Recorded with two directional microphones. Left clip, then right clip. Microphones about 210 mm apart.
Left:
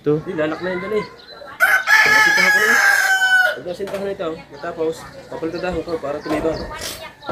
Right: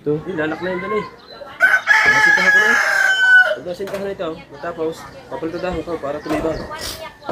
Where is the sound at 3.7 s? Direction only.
15° right (ahead or behind).